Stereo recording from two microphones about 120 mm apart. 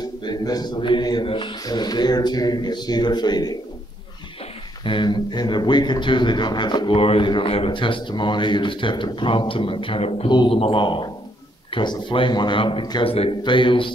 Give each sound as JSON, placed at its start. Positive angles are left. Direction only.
{"t": 0.2, "sound": "a man's voice", "side_deg": 35}
{"t": 4.8, "sound": "a man's voice", "side_deg": 40}
{"t": 10.3, "sound": "a man's voice", "side_deg": 45}
{"t": 13.1, "sound": "a man's voice", "side_deg": 55}
{"t": 13.4, "sound": "a man's voice", "side_deg": 40}